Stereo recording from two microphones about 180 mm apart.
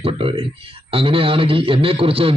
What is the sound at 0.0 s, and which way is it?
A man's voice, 30° right (ahead or behind).